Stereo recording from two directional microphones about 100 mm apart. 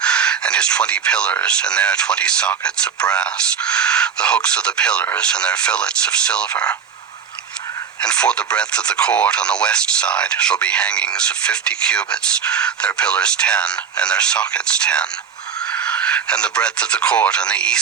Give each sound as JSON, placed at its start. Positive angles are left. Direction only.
{"t": 0.0, "sound": "speech", "side_deg": 10}
{"t": 8.0, "sound": "speech", "side_deg": 10}